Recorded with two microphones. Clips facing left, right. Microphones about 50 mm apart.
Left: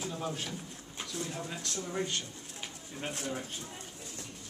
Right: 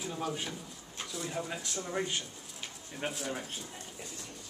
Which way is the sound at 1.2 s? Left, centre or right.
Centre.